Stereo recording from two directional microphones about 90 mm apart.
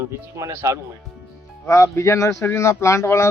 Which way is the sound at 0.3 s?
35° right (ahead or behind).